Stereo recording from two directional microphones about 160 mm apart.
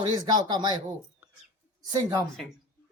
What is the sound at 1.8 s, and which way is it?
Speech, 25° right (ahead or behind).